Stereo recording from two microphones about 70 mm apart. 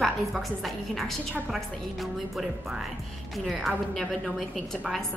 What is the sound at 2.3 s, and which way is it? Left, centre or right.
A woman's voice, centre.